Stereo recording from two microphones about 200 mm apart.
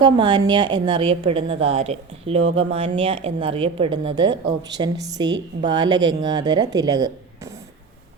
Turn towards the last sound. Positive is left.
turn(degrees=-20)  # may be behind; listen again after turning